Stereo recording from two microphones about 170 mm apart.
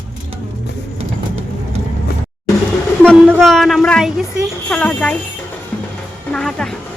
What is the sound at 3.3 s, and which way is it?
A woman's voice, centre (ahead or behind).